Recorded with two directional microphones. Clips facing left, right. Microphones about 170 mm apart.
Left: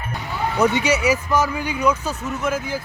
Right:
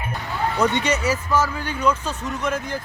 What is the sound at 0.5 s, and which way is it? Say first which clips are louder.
Speech: left 3 dB; 5° left (ahead or behind).